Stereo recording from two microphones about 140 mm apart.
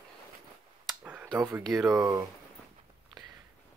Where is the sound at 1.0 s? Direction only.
10° right (ahead or behind).